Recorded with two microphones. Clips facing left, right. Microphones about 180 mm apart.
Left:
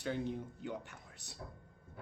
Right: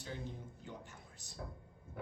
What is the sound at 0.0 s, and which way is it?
Speech, 65° left (ahead or behind).